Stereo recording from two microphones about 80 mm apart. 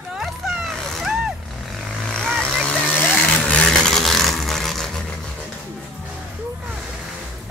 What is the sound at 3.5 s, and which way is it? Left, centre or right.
Vehicle, centre.